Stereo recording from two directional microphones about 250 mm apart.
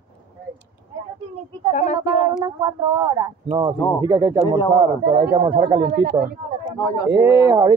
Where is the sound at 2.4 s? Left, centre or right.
Centre.